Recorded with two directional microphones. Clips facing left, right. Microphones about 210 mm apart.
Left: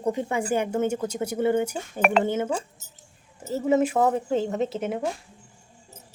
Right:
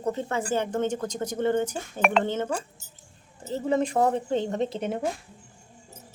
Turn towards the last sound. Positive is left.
turn(degrees=5)  # may be behind; listen again after turning